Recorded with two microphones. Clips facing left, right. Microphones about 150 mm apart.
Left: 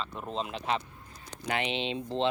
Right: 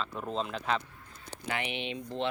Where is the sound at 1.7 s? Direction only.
20° left (ahead or behind).